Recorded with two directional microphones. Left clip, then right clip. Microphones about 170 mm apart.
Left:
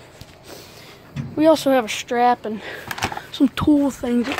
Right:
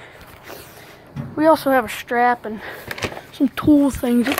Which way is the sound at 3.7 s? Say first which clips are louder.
Right 3 dB; 10° right (ahead or behind).